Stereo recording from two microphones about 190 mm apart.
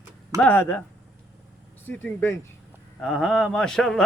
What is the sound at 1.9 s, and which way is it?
A man's voice, 15° left (ahead or behind).